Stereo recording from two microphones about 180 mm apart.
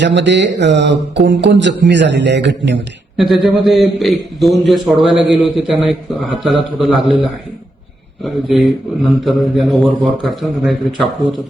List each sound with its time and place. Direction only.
0.0 s speech: 80° right
3.2 s a man's voice: centre (ahead or behind)